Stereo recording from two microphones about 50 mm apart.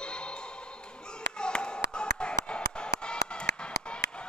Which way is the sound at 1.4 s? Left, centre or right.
Centre.